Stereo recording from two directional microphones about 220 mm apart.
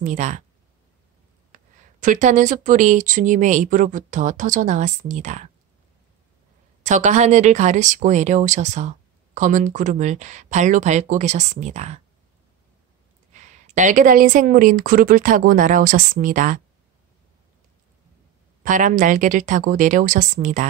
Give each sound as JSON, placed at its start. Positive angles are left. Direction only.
{"t": 0.0, "sound": "speech", "side_deg": -35}
{"t": 1.5, "sound": "speech", "side_deg": -35}
{"t": 6.8, "sound": "speech", "side_deg": -35}
{"t": 13.3, "sound": "speech", "side_deg": -35}
{"t": 18.6, "sound": "speech", "side_deg": -35}